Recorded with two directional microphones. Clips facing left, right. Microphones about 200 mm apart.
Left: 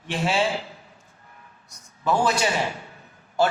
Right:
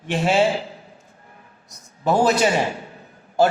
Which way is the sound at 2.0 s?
40° right (ahead or behind).